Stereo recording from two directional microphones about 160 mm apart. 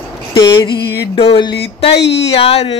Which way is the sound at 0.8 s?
90° left.